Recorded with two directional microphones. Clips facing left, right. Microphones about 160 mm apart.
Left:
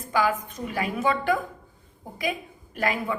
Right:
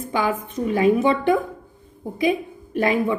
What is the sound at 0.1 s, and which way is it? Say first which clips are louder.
A woman's voice: right 1 dB; 25° right (ahead or behind).